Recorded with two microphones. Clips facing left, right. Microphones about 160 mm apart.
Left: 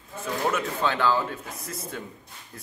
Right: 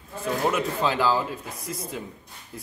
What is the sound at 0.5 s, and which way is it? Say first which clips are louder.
Speech: right 1 dB; 10° right (ahead or behind).